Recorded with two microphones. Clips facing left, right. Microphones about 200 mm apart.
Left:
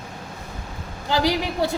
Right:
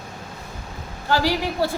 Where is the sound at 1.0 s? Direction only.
15° left (ahead or behind).